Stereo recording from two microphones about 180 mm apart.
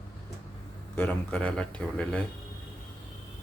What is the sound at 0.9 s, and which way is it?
Speech, 5° left (ahead or behind).